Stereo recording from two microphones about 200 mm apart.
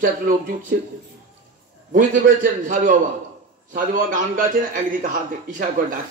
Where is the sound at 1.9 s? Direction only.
40° right (ahead or behind).